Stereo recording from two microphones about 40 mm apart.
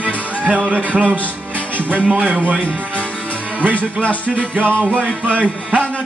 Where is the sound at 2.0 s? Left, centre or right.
Right.